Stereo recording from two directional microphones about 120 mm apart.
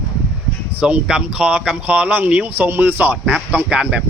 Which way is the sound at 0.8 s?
10° right (ahead or behind).